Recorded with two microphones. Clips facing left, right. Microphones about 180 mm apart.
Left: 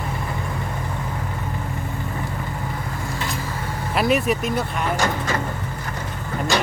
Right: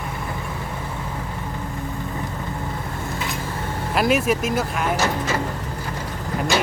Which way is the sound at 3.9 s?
Centre (ahead or behind).